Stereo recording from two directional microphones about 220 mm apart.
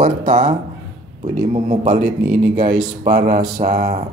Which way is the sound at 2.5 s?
35° right (ahead or behind).